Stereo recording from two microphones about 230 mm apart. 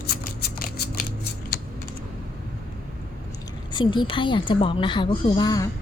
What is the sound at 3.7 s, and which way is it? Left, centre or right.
A woman's voice, centre.